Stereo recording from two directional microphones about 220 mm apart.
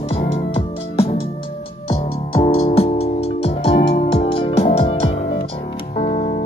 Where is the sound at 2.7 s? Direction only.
25° left (ahead or behind).